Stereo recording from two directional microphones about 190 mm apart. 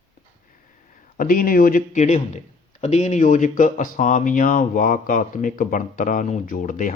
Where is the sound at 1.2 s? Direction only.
45° left (ahead or behind).